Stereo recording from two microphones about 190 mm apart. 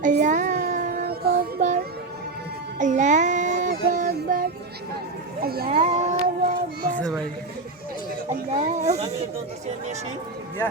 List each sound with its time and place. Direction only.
0.0 s child singing: 40° right (ahead or behind)
2.7 s music: 40° right (ahead or behind)
4.1 s child singing: 50° right (ahead or behind)
5.4 s speech: 55° right (ahead or behind)
5.7 s speech: 35° right (ahead or behind)
8.3 s speech: 35° right (ahead or behind)